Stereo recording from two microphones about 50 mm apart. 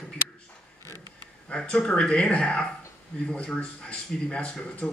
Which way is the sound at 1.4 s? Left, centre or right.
Left.